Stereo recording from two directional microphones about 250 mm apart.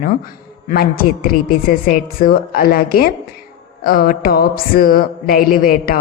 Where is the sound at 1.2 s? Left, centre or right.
Left.